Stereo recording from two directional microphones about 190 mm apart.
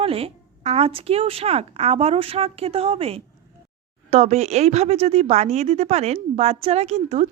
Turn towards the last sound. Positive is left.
turn(degrees=-35)  # may be behind; listen again after turning